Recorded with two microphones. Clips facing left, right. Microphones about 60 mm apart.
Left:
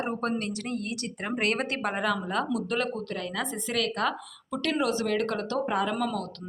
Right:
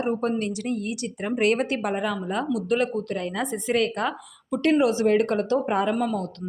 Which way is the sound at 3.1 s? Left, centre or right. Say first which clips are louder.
Right 4 dB; right.